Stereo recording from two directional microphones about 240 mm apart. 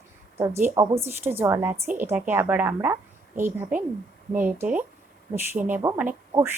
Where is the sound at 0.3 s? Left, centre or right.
Centre.